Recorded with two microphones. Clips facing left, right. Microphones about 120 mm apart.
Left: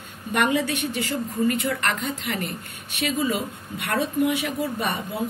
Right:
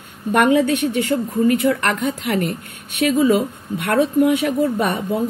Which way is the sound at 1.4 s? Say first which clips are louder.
Right 6 dB; 50° right (ahead or behind).